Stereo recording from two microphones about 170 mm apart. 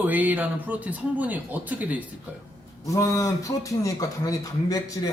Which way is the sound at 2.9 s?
20° left (ahead or behind).